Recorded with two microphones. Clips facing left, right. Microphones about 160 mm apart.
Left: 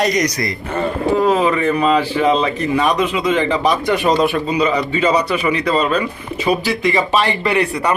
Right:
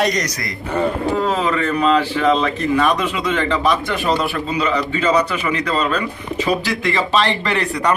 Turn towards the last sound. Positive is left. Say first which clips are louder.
# left 2 dB
turn(degrees=10)  # may be behind; listen again after turning